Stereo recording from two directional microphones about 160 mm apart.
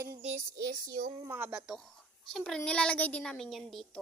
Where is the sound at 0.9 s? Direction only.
60° right (ahead or behind).